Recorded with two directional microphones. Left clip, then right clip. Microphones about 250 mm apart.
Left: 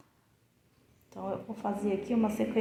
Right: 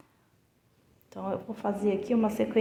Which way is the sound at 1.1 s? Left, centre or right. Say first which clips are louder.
Right 3 dB; right.